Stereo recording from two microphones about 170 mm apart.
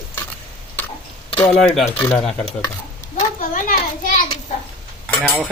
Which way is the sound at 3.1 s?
50° left (ahead or behind).